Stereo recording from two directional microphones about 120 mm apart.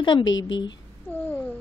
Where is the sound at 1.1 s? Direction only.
15° left (ahead or behind).